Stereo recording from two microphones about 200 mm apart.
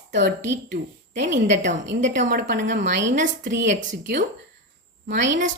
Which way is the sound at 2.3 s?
45° right (ahead or behind).